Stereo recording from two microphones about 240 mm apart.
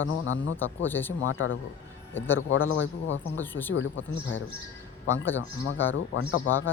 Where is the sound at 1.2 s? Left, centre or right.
Left.